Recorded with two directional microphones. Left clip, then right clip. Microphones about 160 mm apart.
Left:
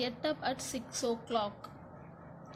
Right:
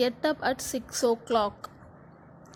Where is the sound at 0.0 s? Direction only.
55° right (ahead or behind).